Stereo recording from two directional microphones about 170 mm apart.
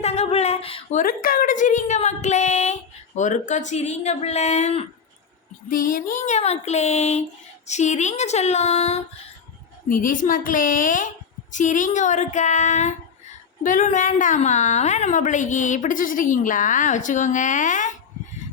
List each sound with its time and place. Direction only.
0.0 s speech: 40° left (ahead or behind)
0.9 s a woman's voice: 55° left (ahead or behind); by 4.9 s 40° left (ahead or behind)
5.6 s speech: 55° left (ahead or behind)
9.9 s a woman's voice: 50° left (ahead or behind)